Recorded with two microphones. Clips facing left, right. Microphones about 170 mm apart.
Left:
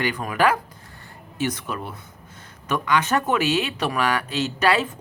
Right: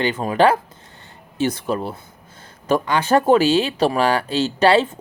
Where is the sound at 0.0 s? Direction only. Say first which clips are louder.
Right 5 dB; 25° right (ahead or behind).